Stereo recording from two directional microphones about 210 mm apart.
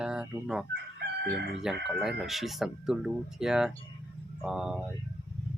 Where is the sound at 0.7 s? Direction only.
55° right (ahead or behind).